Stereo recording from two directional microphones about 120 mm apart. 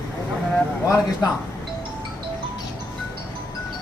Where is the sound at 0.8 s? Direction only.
30° left (ahead or behind).